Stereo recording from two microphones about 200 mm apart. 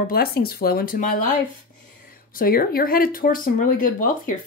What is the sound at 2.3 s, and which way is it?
Speech, 45° left (ahead or behind).